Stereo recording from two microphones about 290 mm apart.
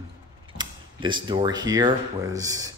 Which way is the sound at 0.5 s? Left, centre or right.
Centre.